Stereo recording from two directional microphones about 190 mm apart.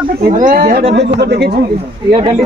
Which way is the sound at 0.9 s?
60° right (ahead or behind).